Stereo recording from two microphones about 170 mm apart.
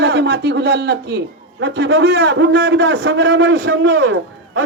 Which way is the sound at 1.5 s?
90° right.